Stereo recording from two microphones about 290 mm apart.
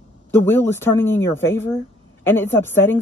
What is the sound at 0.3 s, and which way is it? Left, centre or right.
Speech, centre.